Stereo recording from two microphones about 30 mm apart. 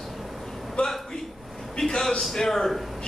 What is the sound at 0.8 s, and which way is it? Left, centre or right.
Speech, left.